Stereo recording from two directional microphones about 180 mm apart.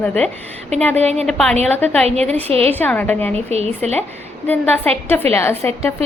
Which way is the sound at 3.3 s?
35° right (ahead or behind).